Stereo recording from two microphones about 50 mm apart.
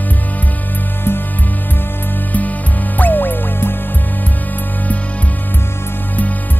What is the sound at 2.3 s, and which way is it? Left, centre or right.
Music, left.